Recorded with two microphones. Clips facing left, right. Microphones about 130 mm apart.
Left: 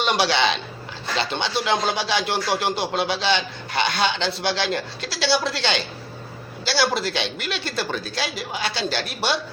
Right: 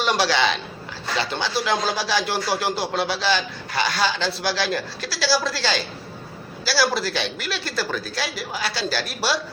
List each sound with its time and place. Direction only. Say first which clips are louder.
0.0 s a man's voice: even; 20° left (ahead or behind)